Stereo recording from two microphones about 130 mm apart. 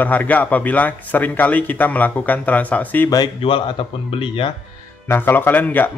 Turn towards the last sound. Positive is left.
turn(degrees=15)  # may be behind; listen again after turning